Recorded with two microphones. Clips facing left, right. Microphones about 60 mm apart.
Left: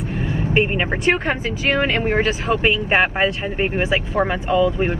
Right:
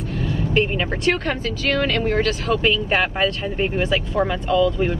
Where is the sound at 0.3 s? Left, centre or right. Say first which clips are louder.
Left 1 dB; left.